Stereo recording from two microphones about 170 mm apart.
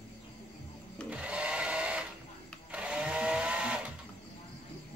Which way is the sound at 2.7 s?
5° right (ahead or behind).